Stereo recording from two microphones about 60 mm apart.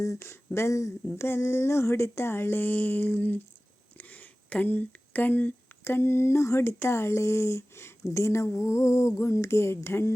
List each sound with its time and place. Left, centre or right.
0.2 s speech: left
1.2 s speech: left